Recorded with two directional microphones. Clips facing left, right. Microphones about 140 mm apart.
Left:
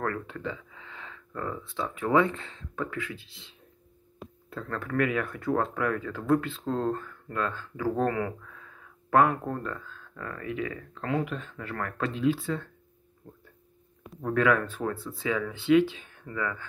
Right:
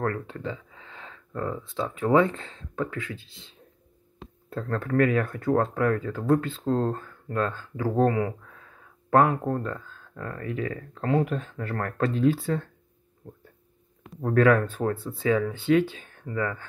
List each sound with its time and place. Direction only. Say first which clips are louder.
0.0 s a sound: right 3 dB; 30° right (ahead or behind)
1.8 s speech: right 3 dB; 25° right (ahead or behind)
4.5 s speech: right 6 dB; 35° right (ahead or behind)
7.8 s speech: right 4 dB; 20° right (ahead or behind); by 12.6 s 40° right (ahead or behind)
14.2 s speech: right 4 dB; 40° right (ahead or behind)